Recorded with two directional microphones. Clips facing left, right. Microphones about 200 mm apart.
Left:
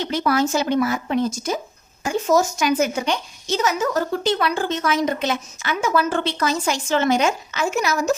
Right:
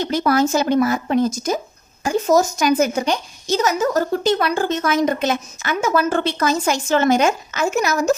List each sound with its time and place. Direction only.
0.0 s a woman's voice: 40° right (ahead or behind)